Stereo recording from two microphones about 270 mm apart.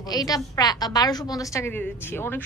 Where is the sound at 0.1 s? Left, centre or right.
Centre.